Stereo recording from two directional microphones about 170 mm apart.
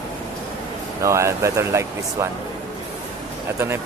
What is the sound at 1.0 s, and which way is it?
Speech, 15° right (ahead or behind).